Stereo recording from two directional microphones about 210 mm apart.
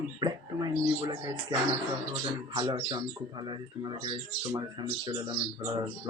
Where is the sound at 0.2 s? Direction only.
20° right (ahead or behind).